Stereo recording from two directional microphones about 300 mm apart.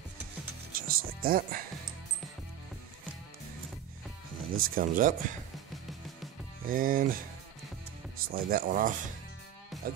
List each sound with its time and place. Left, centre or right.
0.7 s music: right
4.5 s speech: right
6.6 s speech: right
8.2 s speech: right